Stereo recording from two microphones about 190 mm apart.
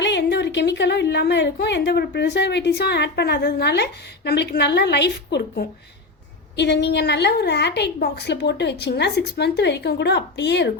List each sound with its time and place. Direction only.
0.0 s a woman's voice: 65° left (ahead or behind)